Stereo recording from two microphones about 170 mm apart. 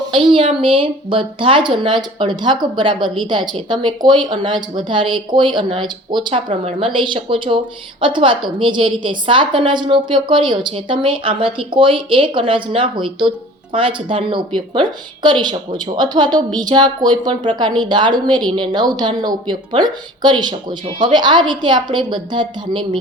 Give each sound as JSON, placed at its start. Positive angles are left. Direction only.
{"t": 0.1, "sound": "a woman's voice", "side_deg": -30}